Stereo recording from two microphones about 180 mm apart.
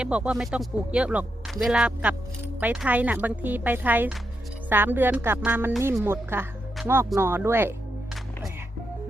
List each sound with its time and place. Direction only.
0.0 s speech: 5° right (ahead or behind)